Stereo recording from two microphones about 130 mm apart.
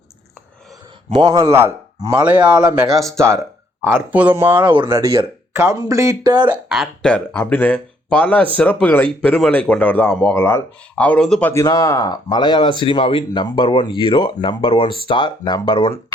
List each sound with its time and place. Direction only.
1.1 s speech: 30° right (ahead or behind); by 2.6 s 10° right (ahead or behind)
3.8 s speech: 15° right (ahead or behind)
4.7 s speech: 30° right (ahead or behind)
6.5 s speech: 5° right (ahead or behind)
11.5 s speech: 25° left (ahead or behind)